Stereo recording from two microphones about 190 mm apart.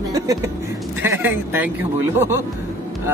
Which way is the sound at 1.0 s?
10° right (ahead or behind).